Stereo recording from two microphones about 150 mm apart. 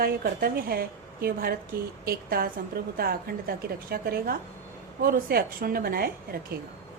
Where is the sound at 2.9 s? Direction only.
90° right.